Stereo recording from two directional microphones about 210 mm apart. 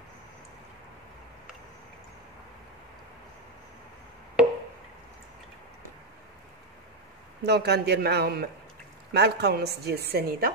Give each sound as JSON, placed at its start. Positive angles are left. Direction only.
{"t": 7.4, "sound": "a man's voice", "side_deg": -50}